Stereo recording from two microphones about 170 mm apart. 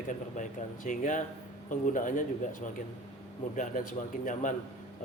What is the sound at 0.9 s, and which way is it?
Speech, 50° left (ahead or behind).